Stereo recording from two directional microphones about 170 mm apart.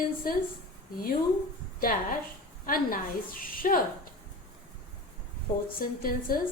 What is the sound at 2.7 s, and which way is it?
A woman's voice, 55° left (ahead or behind).